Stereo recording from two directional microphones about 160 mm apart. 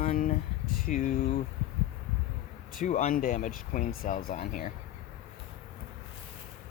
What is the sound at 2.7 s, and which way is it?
Speech, 50° left (ahead or behind).